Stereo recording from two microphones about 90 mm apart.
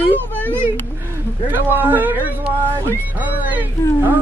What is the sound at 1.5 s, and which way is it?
Speech, 20° right (ahead or behind).